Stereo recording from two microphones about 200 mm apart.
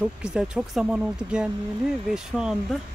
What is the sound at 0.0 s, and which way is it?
Speech, 5° right (ahead or behind).